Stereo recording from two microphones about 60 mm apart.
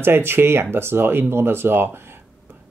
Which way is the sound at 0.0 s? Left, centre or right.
Right.